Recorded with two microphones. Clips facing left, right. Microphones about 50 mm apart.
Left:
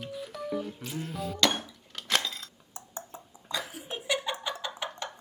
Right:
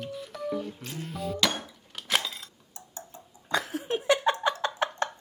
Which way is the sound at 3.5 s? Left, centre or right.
Right.